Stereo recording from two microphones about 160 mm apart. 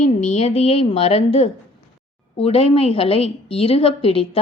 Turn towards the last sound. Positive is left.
turn(degrees=35)  # may be behind; listen again after turning